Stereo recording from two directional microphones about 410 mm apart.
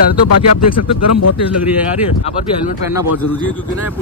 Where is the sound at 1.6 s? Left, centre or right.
Centre.